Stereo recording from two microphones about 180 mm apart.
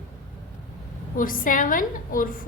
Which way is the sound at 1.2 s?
50° left (ahead or behind).